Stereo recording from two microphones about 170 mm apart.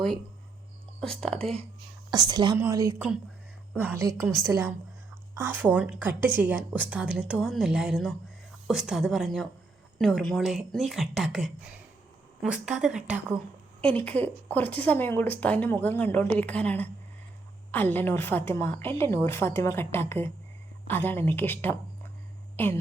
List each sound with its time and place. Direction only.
1.0 s speech: 5° left (ahead or behind)
2.0 s a woman's voice: 25° right (ahead or behind); by 13.2 s 5° right (ahead or behind)
13.8 s a woman's voice: 10° left (ahead or behind)